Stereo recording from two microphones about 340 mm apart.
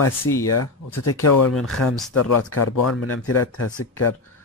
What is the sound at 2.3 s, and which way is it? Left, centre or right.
Speech, left.